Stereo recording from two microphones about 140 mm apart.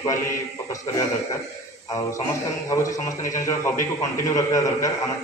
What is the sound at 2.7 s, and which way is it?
A man's voice, 20° left (ahead or behind).